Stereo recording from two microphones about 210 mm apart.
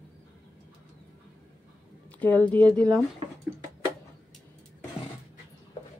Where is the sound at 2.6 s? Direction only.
20° right (ahead or behind).